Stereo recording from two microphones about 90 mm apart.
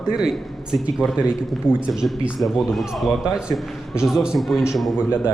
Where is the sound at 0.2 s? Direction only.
10° right (ahead or behind).